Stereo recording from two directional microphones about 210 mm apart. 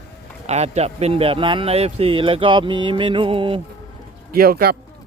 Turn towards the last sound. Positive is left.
turn(degrees=-45)  # may be behind; listen again after turning